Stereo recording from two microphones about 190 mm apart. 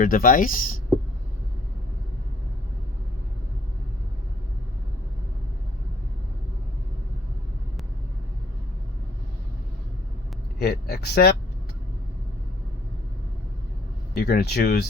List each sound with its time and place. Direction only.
0.0 s speech: 45° left (ahead or behind)
10.6 s speech: 55° left (ahead or behind)
14.2 s speech: 55° left (ahead or behind)